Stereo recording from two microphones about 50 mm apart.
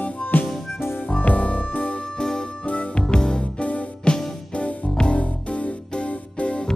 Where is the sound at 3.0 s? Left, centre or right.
Centre.